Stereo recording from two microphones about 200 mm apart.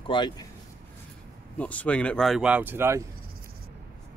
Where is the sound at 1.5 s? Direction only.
5° left (ahead or behind); by 3.0 s 10° right (ahead or behind).